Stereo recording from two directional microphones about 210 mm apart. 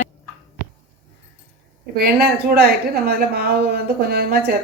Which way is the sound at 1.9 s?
45° right (ahead or behind).